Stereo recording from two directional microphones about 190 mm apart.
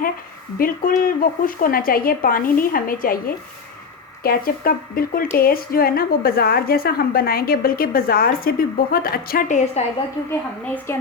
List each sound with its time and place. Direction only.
0.6 s a woman's voice: 50° left (ahead or behind)